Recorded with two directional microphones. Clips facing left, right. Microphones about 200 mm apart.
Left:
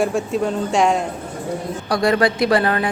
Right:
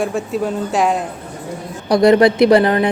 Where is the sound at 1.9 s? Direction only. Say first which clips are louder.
Right 7 dB; 20° right (ahead or behind).